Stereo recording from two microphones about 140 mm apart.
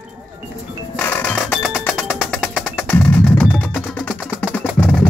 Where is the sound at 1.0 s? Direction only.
15° left (ahead or behind).